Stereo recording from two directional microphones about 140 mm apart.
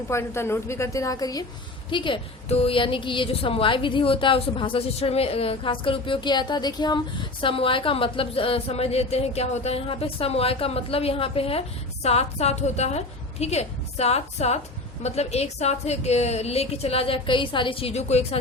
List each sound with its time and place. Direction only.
0.1 s a woman's voice: 20° left (ahead or behind); by 18.3 s 50° left (ahead or behind)